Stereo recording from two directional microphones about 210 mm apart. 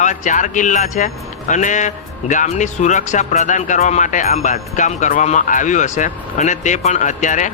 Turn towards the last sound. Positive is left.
turn(degrees=35)  # may be behind; listen again after turning